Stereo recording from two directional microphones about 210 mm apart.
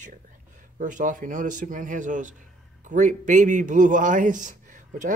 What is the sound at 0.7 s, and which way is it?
A man's voice, 35° right (ahead or behind).